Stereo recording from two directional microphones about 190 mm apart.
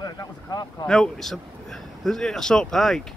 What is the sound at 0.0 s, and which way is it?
Speech, 20° left (ahead or behind).